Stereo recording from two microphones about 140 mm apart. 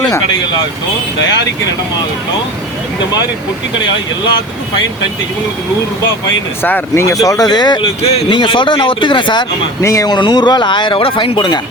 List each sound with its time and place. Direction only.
6.6 s speech: 15° left (ahead or behind); by 7.9 s 30° left (ahead or behind)
8.0 s speech: 40° left (ahead or behind)
9.8 s speech: 25° left (ahead or behind)
10.2 s speech: 35° left (ahead or behind)